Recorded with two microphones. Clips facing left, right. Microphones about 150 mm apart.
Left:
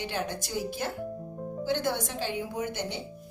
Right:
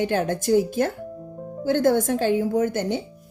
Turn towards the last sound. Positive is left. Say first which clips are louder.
# right 10 dB
turn(degrees=-50)  # may be behind; listen again after turning